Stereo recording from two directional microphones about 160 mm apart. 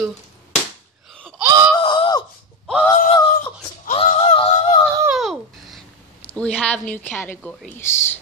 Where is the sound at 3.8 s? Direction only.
40° left (ahead or behind).